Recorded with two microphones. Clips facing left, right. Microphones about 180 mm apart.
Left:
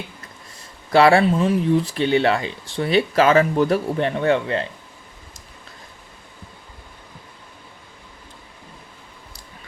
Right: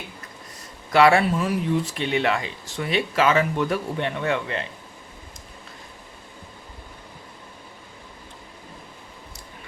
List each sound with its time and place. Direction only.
0.9 s speech: 30° left (ahead or behind)